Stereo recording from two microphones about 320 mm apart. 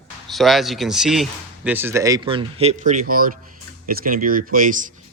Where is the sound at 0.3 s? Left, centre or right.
Centre.